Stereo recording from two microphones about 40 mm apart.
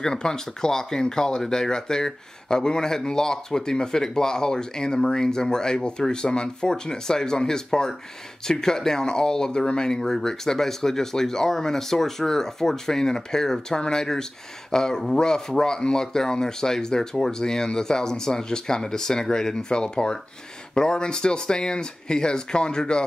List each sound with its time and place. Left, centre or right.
0.0 s speech: centre